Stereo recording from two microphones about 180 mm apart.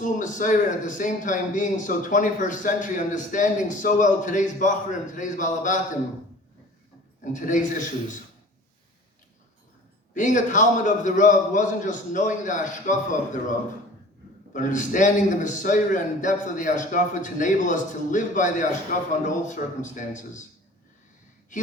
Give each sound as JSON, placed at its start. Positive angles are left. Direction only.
{"t": 0.0, "sound": "a man's voice", "side_deg": 45}
{"t": 7.3, "sound": "a man's voice", "side_deg": 45}
{"t": 10.2, "sound": "a man's voice", "side_deg": 45}